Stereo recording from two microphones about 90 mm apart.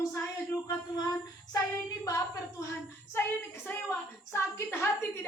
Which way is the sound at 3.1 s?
25° left (ahead or behind).